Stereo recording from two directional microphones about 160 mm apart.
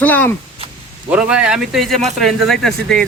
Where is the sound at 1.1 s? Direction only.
5° right (ahead or behind).